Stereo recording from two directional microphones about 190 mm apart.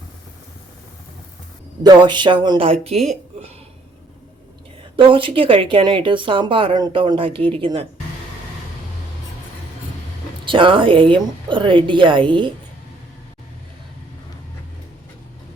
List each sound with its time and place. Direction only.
1.8 s speech: 20° right (ahead or behind)
4.9 s speech: 25° right (ahead or behind)
10.4 s speech: 25° right (ahead or behind)